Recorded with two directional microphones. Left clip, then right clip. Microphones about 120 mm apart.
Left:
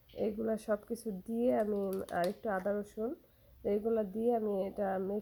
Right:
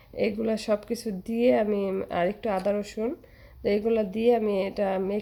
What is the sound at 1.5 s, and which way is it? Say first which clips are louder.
Speech: right 8 dB; 15° left (ahead or behind).